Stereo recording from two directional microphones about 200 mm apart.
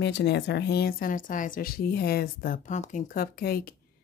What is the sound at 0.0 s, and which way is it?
Speech, 60° left (ahead or behind).